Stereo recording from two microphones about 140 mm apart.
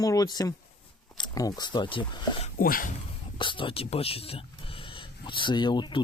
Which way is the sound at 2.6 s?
85° left.